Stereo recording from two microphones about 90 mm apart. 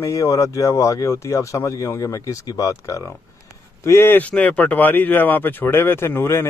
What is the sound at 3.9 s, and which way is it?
Speech, 25° left (ahead or behind).